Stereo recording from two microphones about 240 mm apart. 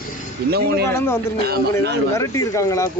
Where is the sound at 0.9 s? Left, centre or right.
Centre.